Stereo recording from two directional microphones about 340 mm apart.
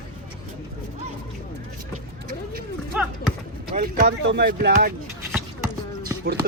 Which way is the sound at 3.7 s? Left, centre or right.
Right.